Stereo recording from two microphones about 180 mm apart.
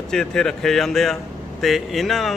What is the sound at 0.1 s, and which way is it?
Speech, 5° left (ahead or behind).